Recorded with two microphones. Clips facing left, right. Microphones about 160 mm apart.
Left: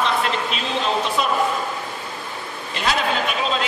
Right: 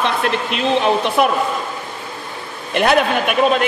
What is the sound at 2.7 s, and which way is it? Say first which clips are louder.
Speech: right 8 dB; 60° right (ahead or behind).